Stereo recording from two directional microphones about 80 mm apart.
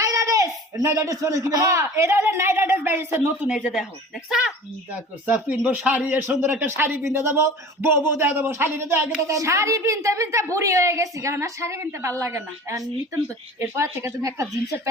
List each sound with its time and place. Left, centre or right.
0.0 s speech: right
3.4 s speech: centre
4.9 s a woman's voice: right